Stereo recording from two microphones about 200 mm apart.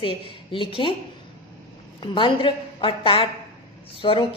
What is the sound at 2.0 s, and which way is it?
A woman's voice, 25° left (ahead or behind).